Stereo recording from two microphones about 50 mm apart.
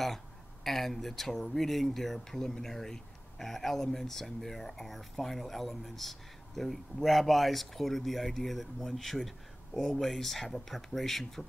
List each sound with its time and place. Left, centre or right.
0.7 s speech: centre